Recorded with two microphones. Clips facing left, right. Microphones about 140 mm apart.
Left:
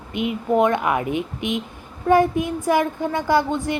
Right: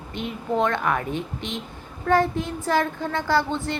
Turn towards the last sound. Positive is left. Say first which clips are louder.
# left 3 dB
turn(degrees=15)  # may be behind; listen again after turning